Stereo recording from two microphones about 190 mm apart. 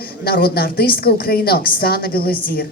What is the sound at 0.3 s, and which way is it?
A woman's voice, 55° left (ahead or behind).